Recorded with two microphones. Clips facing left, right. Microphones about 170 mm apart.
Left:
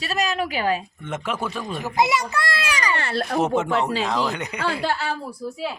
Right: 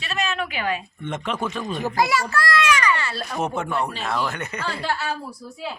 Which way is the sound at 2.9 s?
55° left (ahead or behind).